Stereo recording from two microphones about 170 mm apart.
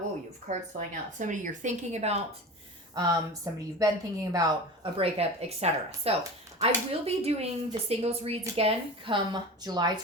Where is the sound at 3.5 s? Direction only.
15° right (ahead or behind).